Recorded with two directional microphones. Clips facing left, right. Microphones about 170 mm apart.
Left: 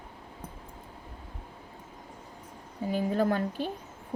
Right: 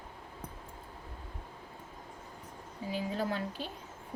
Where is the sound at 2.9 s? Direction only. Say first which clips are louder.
Left 7 dB; 50° left (ahead or behind).